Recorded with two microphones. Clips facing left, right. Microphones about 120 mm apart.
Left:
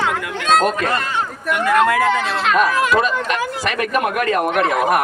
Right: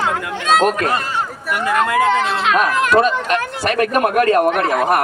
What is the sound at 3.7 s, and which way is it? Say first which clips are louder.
A man's voice: right 6 dB; 45° right (ahead or behind).